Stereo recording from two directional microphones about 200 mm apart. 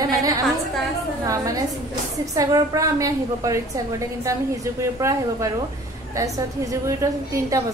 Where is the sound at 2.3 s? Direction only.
15° right (ahead or behind).